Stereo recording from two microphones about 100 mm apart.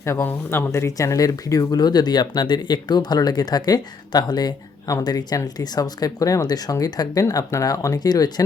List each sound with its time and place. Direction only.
0.2 s speech: 15° left (ahead or behind)
0.7 s speech: 35° left (ahead or behind)